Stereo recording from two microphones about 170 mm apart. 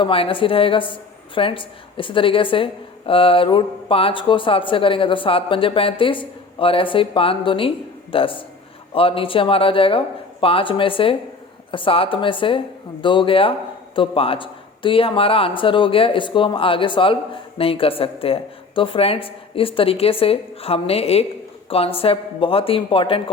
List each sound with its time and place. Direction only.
0.0 s speech: 30° left (ahead or behind)